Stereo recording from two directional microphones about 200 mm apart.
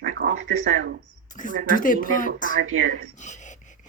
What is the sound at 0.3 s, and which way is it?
Speech, 90° right.